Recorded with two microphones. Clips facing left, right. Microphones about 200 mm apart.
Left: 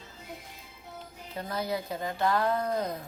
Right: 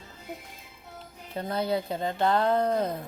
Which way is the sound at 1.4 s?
30° right (ahead or behind).